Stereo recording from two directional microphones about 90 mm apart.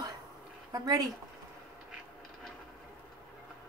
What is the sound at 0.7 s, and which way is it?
Speech, 45° right (ahead or behind).